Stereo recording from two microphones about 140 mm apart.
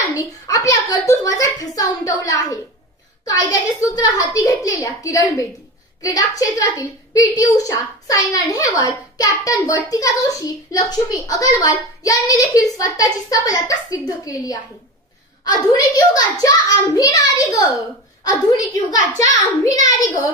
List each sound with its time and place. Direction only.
0.2 s a woman's voice: 25° left (ahead or behind)